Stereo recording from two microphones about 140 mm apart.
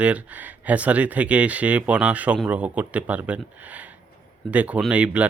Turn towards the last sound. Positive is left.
turn(degrees=-10)  # may be behind; listen again after turning